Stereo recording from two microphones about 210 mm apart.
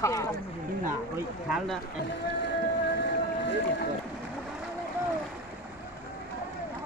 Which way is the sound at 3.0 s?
55° left (ahead or behind).